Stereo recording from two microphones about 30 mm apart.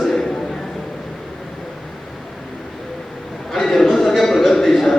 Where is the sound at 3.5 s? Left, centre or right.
Centre.